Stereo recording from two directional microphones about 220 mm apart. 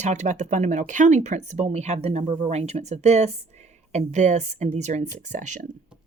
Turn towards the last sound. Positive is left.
turn(degrees=-35)  # may be behind; listen again after turning